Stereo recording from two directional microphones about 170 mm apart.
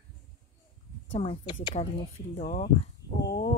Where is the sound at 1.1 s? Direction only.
30° left (ahead or behind).